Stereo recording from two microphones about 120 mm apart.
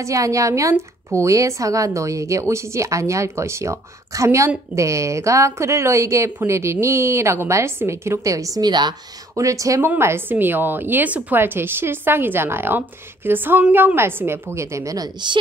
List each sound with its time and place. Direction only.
0.0 s a woman's voice: 25° right (ahead or behind)